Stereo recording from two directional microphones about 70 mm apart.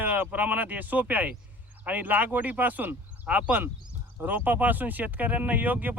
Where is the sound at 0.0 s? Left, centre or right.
Right.